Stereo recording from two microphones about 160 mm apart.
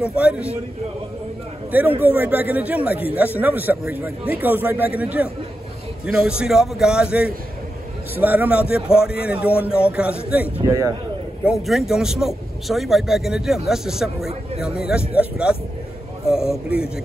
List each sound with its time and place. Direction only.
0.0 s a man's voice: 5° right (ahead or behind)
1.7 s a man's voice: 10° right (ahead or behind)
10.6 s a man's voice: 20° right (ahead or behind)
11.6 s a man's voice: centre (ahead or behind)